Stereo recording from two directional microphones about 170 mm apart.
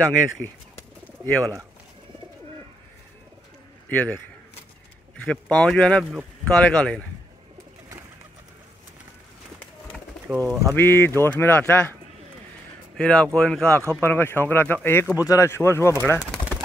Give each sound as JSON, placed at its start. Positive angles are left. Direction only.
{"t": 0.4, "sound": "speech", "side_deg": 10}
{"t": 1.0, "sound": "bird", "side_deg": 10}
{"t": 3.9, "sound": "speech", "side_deg": 10}
{"t": 5.2, "sound": "speech", "side_deg": 5}
{"t": 10.2, "sound": "speech", "side_deg": -10}
{"t": 10.7, "sound": "speech", "side_deg": 15}
{"t": 12.9, "sound": "speech", "side_deg": 5}